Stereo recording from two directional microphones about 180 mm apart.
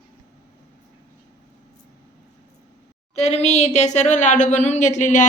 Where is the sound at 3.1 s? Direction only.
35° left (ahead or behind).